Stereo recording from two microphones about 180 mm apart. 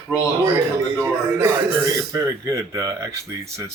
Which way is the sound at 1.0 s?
15° right (ahead or behind).